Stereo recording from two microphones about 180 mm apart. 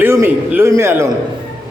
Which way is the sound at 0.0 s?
10° right (ahead or behind).